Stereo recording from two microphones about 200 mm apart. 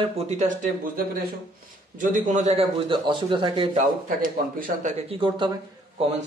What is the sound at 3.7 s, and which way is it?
Speech, 40° right (ahead or behind).